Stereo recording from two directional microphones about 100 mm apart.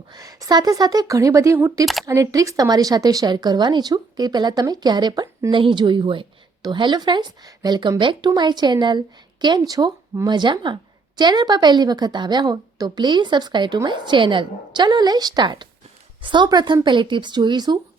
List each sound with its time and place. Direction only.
0.1 s a woman's voice: 35° right (ahead or behind)